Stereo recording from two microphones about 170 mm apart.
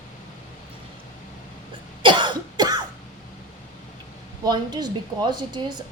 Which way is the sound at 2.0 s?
25° right (ahead or behind).